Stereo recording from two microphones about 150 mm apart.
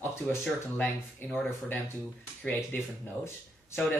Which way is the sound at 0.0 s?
15° left (ahead or behind).